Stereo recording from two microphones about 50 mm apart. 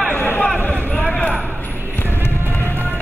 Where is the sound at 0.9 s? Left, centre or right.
Left.